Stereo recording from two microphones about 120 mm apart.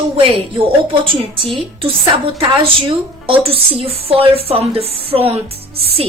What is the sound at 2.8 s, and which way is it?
A woman's voice, 50° right (ahead or behind).